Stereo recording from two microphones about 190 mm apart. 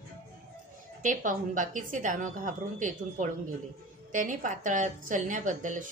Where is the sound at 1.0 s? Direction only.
45° right (ahead or behind).